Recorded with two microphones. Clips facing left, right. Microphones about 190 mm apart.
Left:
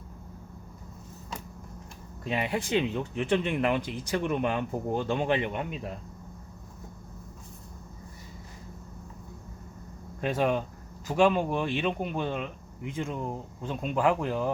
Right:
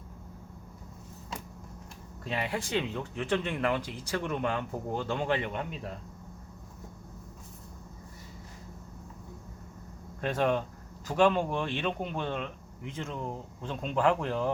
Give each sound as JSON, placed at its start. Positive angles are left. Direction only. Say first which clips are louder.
{"t": 2.2, "sound": "speech", "louder": "left 3 dB", "side_deg": 15}
{"t": 10.2, "sound": "speech", "louder": "left 1 dB", "side_deg": 10}